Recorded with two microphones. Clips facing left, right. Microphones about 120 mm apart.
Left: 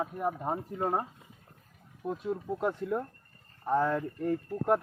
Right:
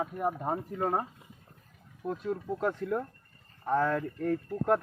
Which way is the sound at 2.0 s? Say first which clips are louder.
Even; 5° left (ahead or behind).